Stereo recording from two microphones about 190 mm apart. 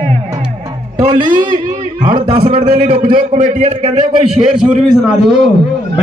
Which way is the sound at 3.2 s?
40° right (ahead or behind).